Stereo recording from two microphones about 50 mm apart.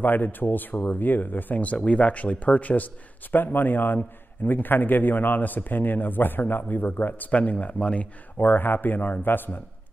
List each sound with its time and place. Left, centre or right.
0.0 s a man's voice: left